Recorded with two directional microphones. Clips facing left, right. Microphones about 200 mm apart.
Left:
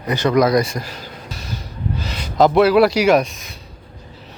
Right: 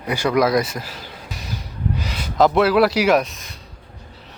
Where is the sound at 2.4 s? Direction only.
Centre (ahead or behind).